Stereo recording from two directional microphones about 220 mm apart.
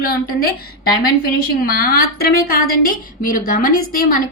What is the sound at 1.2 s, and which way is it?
A woman's voice, 40° left (ahead or behind).